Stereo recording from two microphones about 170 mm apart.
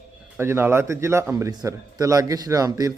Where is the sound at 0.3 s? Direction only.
15° right (ahead or behind).